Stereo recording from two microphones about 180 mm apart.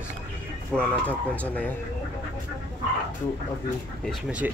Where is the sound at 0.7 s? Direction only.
10° left (ahead or behind).